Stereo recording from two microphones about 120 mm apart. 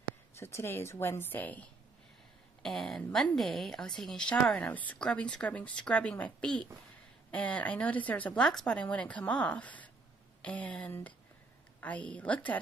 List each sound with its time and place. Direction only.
0.4 s a woman's voice: 20° left (ahead or behind)
2.6 s a woman's voice: 5° left (ahead or behind)